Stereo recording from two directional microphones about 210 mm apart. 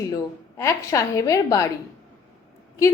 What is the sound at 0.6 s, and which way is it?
A woman's voice, 15° left (ahead or behind).